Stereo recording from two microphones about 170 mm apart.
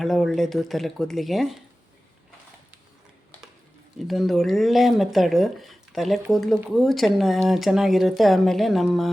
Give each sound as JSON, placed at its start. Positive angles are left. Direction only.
{"t": 0.0, "sound": "speech", "side_deg": 0}
{"t": 4.0, "sound": "speech", "side_deg": 0}